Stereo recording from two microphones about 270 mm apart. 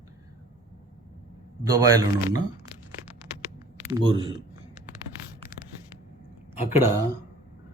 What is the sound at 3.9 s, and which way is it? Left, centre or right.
Speech, centre.